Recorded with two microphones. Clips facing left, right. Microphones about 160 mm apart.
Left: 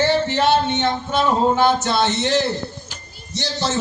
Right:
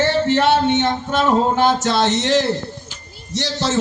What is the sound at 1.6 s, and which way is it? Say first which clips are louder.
A man's voice: right 1 dB; 90° right.